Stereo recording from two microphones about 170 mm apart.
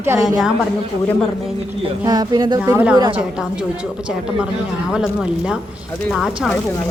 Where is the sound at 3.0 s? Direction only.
30° right (ahead or behind).